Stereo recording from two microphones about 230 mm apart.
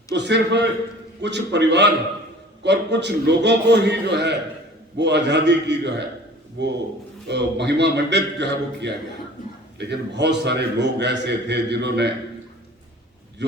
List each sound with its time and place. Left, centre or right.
0.1 s a man's voice: right